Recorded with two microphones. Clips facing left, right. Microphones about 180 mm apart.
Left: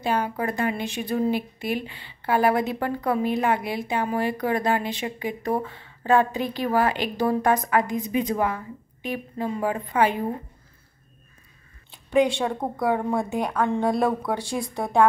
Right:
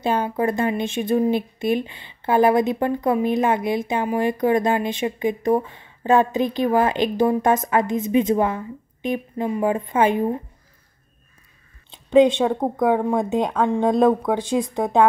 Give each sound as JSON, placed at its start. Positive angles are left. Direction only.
{"t": 0.0, "sound": "speech", "side_deg": -25}
{"t": 11.9, "sound": "a woman's voice", "side_deg": -20}